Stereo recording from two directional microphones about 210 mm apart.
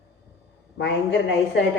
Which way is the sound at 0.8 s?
55° left (ahead or behind).